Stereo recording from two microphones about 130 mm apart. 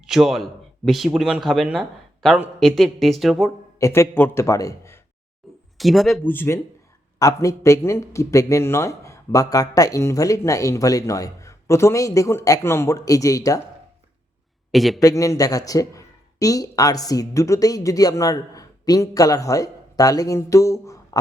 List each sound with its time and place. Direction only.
0.1 s speech: centre (ahead or behind)
3.8 s a man's voice: 20° left (ahead or behind)
5.7 s speech: centre (ahead or behind)
6.2 s a man's voice: 15° left (ahead or behind)
14.7 s a man's voice: centre (ahead or behind)
15.0 s speech: 25° left (ahead or behind)